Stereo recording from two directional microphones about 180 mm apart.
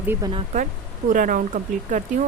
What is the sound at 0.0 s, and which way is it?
Speech, 10° right (ahead or behind).